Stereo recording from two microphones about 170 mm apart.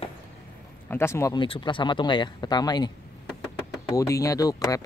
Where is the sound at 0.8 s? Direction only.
15° left (ahead or behind).